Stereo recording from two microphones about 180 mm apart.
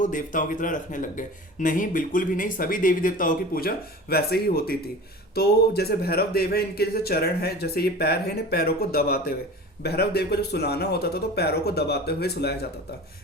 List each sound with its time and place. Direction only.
0.0 s speech: 45° left (ahead or behind); by 12.6 s 65° left (ahead or behind)